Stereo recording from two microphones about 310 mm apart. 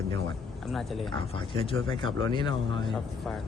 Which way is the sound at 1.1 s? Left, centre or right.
Centre.